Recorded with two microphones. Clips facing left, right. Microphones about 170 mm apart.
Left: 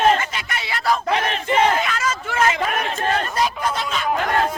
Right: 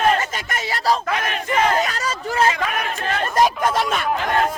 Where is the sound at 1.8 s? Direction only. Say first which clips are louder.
Right 1 dB; 40° right (ahead or behind).